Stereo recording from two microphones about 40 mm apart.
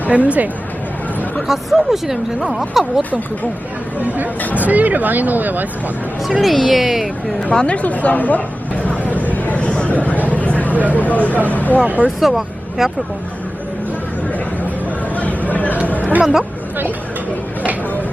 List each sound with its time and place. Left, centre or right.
0.1 s speech: right
1.5 s a woman's voice: centre
4.5 s speech: right
6.4 s speech: centre
7.5 s speech: left
7.8 s speech: left
9.1 s a sound: left
11.1 s speech: left
11.8 s speech: right
12.0 s speech: centre
15.1 s a sound: left
16.2 s a woman's voice: centre